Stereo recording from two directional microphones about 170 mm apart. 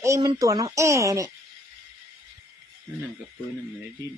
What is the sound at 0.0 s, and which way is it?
Speech, 20° right (ahead or behind).